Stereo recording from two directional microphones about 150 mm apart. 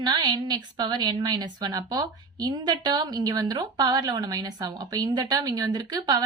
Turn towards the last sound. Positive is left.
turn(degrees=-25)  # may be behind; listen again after turning